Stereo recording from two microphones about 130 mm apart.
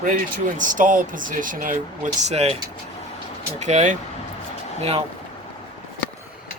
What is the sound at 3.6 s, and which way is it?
Speech, 65° right (ahead or behind).